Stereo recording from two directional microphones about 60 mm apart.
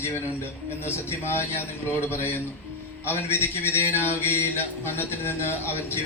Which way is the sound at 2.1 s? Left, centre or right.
Left.